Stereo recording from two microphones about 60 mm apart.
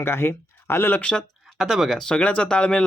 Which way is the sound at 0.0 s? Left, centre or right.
Left.